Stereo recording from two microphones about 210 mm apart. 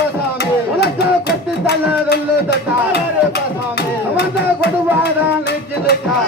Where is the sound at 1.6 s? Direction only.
50° left (ahead or behind).